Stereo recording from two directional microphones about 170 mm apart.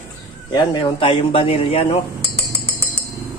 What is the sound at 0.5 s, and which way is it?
Speech, 25° left (ahead or behind).